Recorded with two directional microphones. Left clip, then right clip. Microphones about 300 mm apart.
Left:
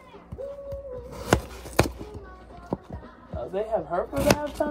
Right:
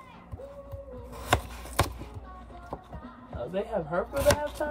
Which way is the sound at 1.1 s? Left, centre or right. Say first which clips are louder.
Left 3 dB; left.